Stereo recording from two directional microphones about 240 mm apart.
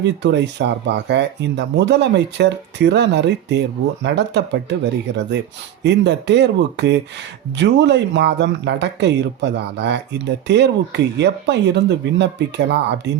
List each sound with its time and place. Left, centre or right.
0.0 s speech: right